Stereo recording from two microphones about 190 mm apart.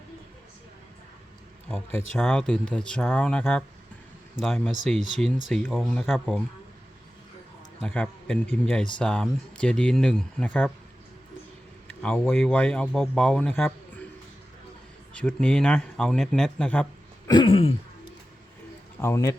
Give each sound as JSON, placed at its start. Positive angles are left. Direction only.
{"t": 1.6, "sound": "speech", "side_deg": 10}
{"t": 7.8, "sound": "speech", "side_deg": 5}
{"t": 11.9, "sound": "speech", "side_deg": 5}
{"t": 15.1, "sound": "speech", "side_deg": 5}
{"t": 17.2, "sound": "throat clearing", "side_deg": 25}
{"t": 18.9, "sound": "a man's voice", "side_deg": 15}